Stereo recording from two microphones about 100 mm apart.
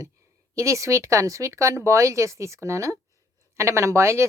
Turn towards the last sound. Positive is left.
turn(degrees=-30)  # may be behind; listen again after turning